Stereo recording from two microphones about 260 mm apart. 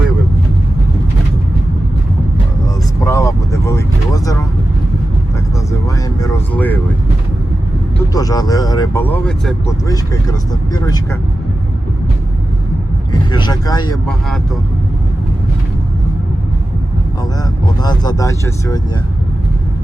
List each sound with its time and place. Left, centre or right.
3.0 s vehicle: centre
6.1 s vehicle: centre
8.1 s vehicle: centre
9.8 s speech: centre
13.3 s speech: centre
17.7 s speech: centre